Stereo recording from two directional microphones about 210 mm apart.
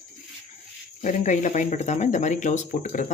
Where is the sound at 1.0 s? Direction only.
35° left (ahead or behind).